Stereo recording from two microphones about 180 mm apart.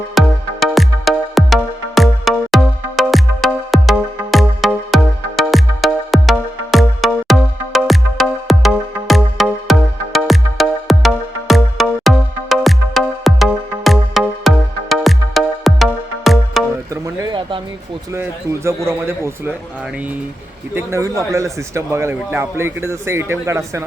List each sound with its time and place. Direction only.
0.1 s music: centre (ahead or behind)
16.9 s a sound: 25° right (ahead or behind)
18.1 s speech: 15° right (ahead or behind)
20.7 s speech: 15° right (ahead or behind)